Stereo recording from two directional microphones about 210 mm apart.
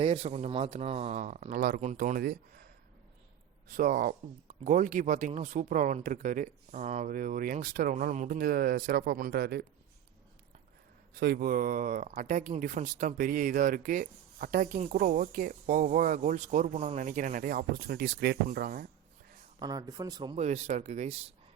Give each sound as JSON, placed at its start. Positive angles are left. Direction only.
{"t": 0.0, "sound": "speech", "side_deg": -30}
{"t": 3.7, "sound": "speech", "side_deg": -40}
{"t": 11.1, "sound": "speech", "side_deg": -45}
{"t": 19.5, "sound": "speech", "side_deg": -20}
{"t": 20.3, "sound": "speech", "side_deg": -30}